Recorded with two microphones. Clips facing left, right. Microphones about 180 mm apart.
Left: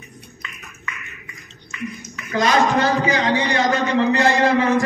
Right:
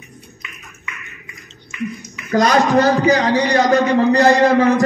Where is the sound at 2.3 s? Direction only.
40° right (ahead or behind).